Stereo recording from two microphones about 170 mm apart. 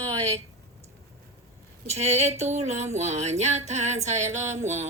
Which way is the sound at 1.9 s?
40° right (ahead or behind).